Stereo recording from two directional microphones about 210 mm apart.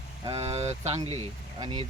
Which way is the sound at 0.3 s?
30° right (ahead or behind).